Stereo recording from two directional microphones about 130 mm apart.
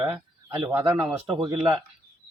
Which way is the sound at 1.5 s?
20° right (ahead or behind).